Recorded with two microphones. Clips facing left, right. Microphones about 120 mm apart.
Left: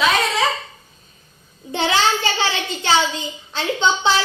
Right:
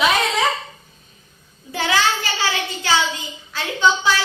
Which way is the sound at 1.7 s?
25° left (ahead or behind).